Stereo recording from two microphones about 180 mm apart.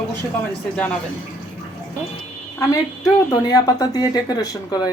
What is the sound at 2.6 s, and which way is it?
Speech, 20° left (ahead or behind).